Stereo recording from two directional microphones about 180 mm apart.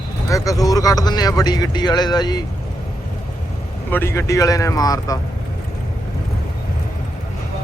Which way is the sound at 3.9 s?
15° left (ahead or behind).